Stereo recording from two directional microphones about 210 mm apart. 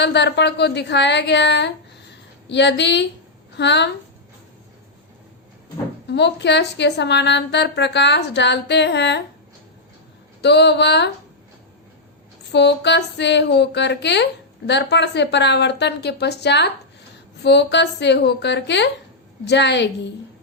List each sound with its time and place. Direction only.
0.0 s a woman's voice: 55° left (ahead or behind)
6.1 s a woman's voice: 55° left (ahead or behind)
10.4 s a woman's voice: 55° left (ahead or behind)
12.5 s a woman's voice: 55° left (ahead or behind)